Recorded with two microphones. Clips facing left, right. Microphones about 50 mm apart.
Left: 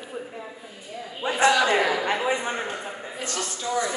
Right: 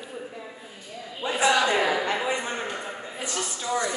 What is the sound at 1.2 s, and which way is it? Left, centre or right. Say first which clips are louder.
Speech: left 1 dB; left.